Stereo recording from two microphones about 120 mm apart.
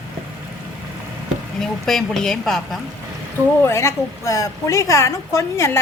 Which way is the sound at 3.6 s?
20° left (ahead or behind).